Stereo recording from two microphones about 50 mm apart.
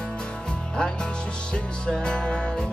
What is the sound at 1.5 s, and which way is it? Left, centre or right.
Music, centre.